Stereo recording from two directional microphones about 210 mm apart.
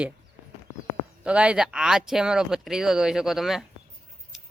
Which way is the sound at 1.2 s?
5° right (ahead or behind).